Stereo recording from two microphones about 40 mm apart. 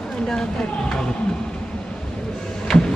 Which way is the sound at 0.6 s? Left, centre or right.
Centre.